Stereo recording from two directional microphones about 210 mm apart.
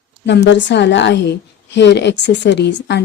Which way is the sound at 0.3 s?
55° left (ahead or behind).